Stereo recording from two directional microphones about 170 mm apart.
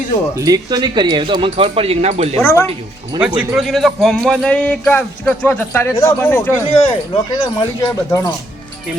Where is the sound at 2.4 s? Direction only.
15° left (ahead or behind).